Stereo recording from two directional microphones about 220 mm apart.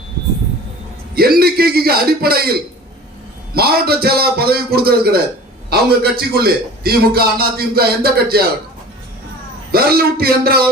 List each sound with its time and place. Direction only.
1.1 s a man's voice: 45° right (ahead or behind)
9.7 s a man's voice: 45° right (ahead or behind)